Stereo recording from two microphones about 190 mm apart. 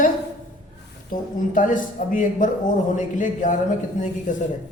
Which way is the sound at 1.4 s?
45° left (ahead or behind).